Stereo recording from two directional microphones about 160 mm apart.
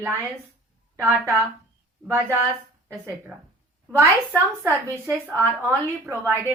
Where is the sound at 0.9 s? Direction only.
15° right (ahead or behind).